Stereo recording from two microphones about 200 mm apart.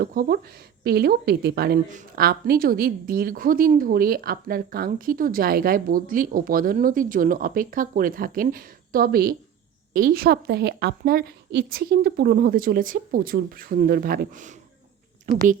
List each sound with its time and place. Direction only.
0.0 s a woman's voice: 50° right (ahead or behind)